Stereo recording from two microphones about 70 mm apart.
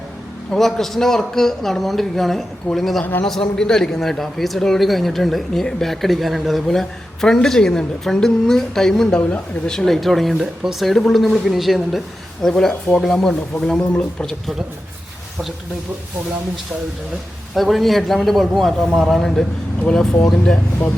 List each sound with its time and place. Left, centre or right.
0.5 s a man's voice: centre
3.0 s a man's voice: left
3.2 s a man's voice: centre
17.5 s a man's voice: centre